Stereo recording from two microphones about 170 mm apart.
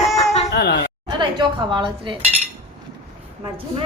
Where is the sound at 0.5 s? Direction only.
80° left.